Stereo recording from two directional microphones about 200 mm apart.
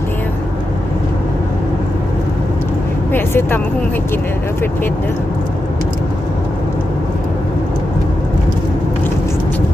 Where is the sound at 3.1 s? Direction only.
10° left (ahead or behind).